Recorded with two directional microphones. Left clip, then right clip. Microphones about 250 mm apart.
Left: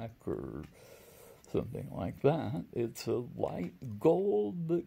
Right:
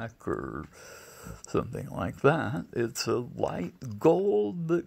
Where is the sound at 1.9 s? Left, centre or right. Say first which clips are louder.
Right 6 dB; centre.